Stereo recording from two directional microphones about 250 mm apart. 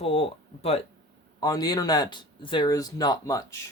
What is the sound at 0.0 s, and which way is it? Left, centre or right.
Speech, left.